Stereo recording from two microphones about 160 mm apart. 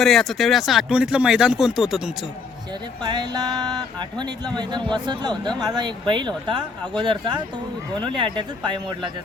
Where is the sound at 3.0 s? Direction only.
25° right (ahead or behind).